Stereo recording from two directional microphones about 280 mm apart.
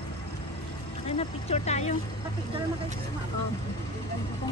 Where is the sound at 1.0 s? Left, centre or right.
Left.